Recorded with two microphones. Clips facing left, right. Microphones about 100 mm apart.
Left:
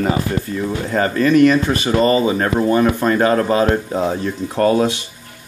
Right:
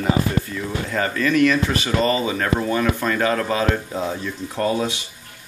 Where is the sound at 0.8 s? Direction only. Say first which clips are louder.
Left 6 dB; 40° left (ahead or behind); by 5.0 s 55° left (ahead or behind).